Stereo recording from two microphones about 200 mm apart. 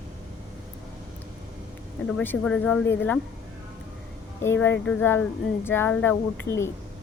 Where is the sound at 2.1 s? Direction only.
5° left (ahead or behind).